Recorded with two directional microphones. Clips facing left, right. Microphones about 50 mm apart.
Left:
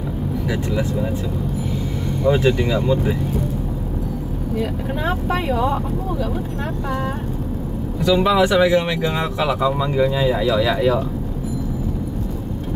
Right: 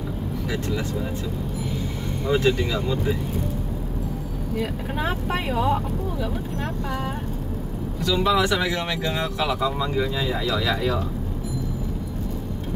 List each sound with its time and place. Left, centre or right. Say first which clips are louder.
0.5 s speech: left 4 dB; centre
2.2 s speech: left 4 dB; left
4.6 s speech: left 3 dB; centre
8.0 s speech: left 5 dB; centre